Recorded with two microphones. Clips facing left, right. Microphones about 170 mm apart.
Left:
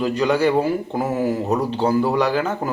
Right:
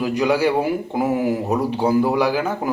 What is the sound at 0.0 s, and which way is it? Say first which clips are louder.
A man's voice: even; 10° right (ahead or behind).